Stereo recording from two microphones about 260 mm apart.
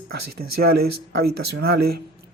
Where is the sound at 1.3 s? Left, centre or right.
Right.